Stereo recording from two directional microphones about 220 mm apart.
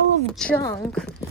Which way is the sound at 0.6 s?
15° left (ahead or behind).